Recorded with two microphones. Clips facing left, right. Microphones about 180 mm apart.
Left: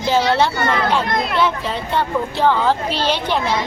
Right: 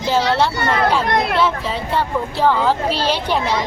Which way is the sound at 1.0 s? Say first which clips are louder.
Right 3 dB; 65° right (ahead or behind).